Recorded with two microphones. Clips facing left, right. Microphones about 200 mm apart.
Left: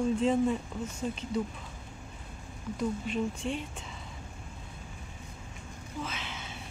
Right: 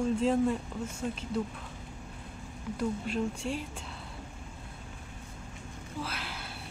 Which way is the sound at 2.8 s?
Centre (ahead or behind).